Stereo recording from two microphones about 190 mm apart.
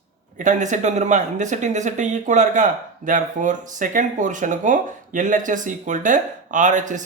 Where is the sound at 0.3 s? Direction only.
40° right (ahead or behind).